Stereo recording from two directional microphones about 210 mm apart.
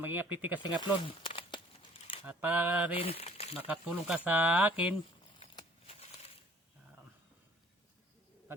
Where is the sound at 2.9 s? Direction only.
25° left (ahead or behind).